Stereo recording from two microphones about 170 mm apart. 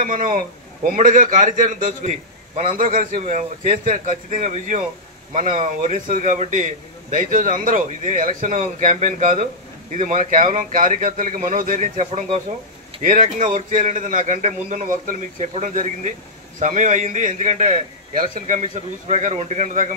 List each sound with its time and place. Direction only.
0.0 s a man's voice: 50° right (ahead or behind)